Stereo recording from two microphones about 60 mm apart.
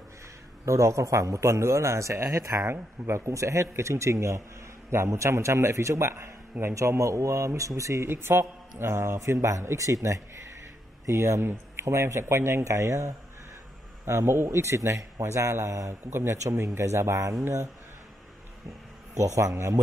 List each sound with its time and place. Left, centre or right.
0.7 s a man's voice: right
8.1 s speech: right
11.1 s speech: right
19.1 s a man's voice: right